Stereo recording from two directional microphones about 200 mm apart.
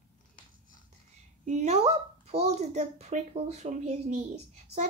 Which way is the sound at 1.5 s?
35° right (ahead or behind).